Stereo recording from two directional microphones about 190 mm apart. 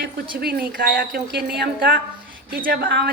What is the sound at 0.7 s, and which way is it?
A woman's voice, 50° right (ahead or behind).